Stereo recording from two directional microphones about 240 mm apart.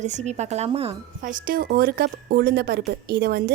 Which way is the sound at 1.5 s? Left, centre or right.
Right.